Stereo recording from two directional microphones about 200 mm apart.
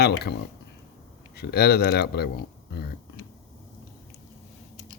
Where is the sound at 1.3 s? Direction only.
50° left (ahead or behind).